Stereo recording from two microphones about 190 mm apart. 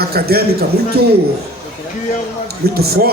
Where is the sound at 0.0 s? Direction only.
55° right (ahead or behind).